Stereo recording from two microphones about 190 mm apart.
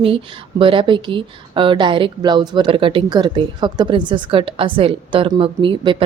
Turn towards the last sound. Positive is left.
turn(degrees=-25)  # may be behind; listen again after turning